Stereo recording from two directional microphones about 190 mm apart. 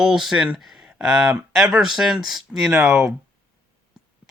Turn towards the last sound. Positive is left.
turn(degrees=0)  # may be behind; listen again after turning